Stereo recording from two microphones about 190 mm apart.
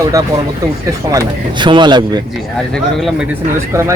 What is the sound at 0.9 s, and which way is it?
Speech, 20° right (ahead or behind).